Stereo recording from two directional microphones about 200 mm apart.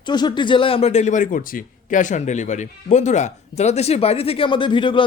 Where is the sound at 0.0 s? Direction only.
20° left (ahead or behind).